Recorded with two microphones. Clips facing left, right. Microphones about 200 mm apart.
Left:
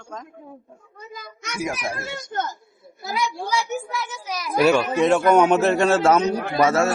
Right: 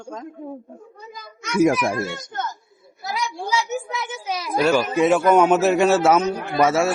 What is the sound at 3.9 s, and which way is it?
Speech, 20° right (ahead or behind).